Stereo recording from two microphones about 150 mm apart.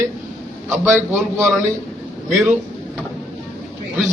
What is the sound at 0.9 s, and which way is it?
Speech, 15° right (ahead or behind).